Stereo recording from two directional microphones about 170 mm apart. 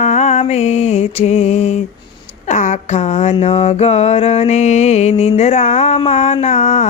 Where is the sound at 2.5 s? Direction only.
45° left (ahead or behind).